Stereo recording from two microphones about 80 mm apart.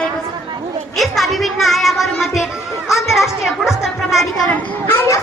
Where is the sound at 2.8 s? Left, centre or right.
Centre.